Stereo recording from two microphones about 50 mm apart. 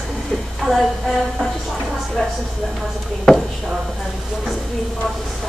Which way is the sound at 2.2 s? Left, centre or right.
Centre.